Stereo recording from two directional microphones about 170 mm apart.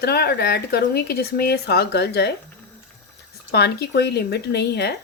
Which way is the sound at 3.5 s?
75° left (ahead or behind).